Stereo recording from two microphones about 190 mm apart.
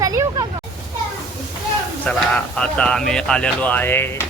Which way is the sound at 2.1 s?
5° left (ahead or behind).